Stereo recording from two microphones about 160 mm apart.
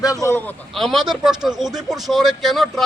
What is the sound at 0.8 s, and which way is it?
Speech, centre (ahead or behind).